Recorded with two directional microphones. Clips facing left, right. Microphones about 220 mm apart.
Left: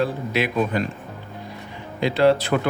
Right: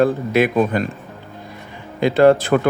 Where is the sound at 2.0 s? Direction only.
50° right (ahead or behind).